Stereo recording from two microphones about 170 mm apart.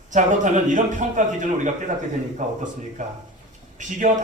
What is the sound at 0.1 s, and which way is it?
A man's voice, 45° right (ahead or behind).